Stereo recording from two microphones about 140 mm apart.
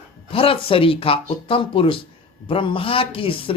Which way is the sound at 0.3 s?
40° left (ahead or behind).